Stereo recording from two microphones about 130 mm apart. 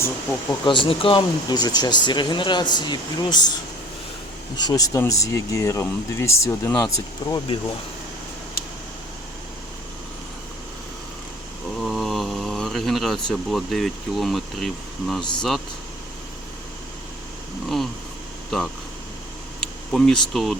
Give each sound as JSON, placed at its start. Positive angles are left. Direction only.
{"t": 0.6, "sound": "speech", "side_deg": 40}
{"t": 4.5, "sound": "speech", "side_deg": 30}
{"t": 11.8, "sound": "speech", "side_deg": 0}
{"t": 19.5, "sound": "speech", "side_deg": 5}